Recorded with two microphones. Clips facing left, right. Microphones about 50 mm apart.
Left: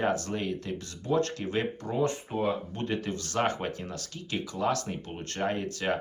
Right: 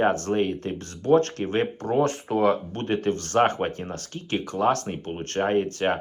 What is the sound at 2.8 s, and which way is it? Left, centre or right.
Speech, right.